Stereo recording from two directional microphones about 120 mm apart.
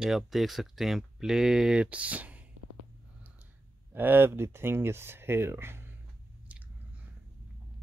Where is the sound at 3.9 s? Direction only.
15° right (ahead or behind).